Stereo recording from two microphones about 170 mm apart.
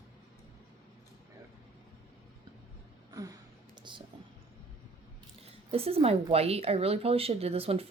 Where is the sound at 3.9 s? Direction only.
25° right (ahead or behind).